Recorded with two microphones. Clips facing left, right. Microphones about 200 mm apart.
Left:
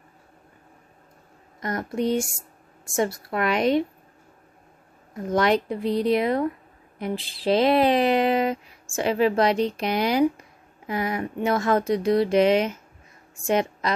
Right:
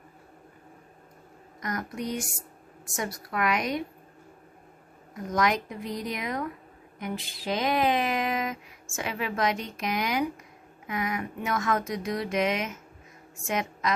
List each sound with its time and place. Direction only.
1.6 s a woman's voice: 30° left (ahead or behind)
5.1 s a woman's voice: 30° left (ahead or behind)